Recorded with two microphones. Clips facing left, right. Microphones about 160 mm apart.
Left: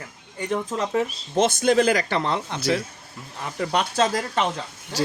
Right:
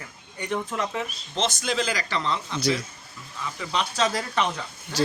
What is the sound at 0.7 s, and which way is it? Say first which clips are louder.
Speech: left 5 dB; 30° left (ahead or behind).